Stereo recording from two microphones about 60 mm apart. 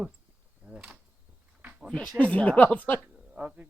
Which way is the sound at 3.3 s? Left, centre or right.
Right.